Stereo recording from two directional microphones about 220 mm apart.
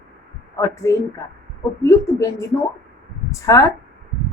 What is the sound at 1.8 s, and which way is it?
A woman's voice, 15° left (ahead or behind).